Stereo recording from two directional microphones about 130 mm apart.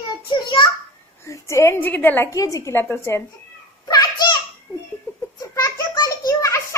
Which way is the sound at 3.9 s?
30° left (ahead or behind).